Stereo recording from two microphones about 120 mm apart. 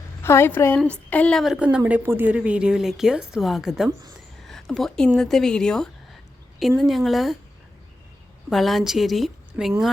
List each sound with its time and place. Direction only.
0.2 s a woman's voice: 20° left (ahead or behind)
1.4 s a woman's voice: 5° right (ahead or behind)
8.4 s a woman's voice: centre (ahead or behind)